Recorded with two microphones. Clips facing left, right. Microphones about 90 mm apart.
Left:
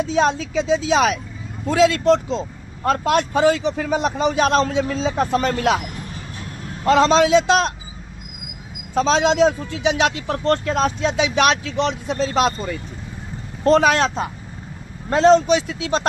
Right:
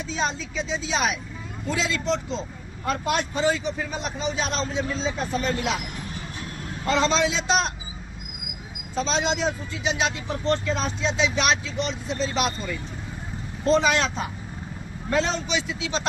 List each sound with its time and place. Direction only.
0.0 s a man's voice: 55° left (ahead or behind)
6.8 s speech: 55° left (ahead or behind)
9.0 s speech: 60° left (ahead or behind)
13.7 s speech: 60° left (ahead or behind)
13.9 s speech: 45° left (ahead or behind)